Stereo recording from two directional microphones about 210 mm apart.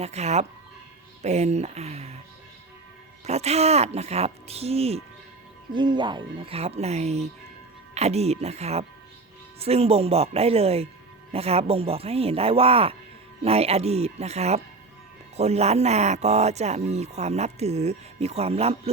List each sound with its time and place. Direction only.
0.0 s speech: 30° right (ahead or behind)
3.2 s speech: 30° right (ahead or behind)